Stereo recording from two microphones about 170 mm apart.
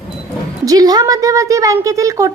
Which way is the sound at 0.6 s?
20° right (ahead or behind).